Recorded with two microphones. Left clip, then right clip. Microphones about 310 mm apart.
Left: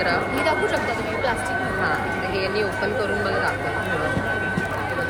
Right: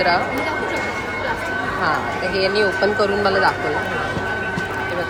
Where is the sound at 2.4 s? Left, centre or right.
Centre.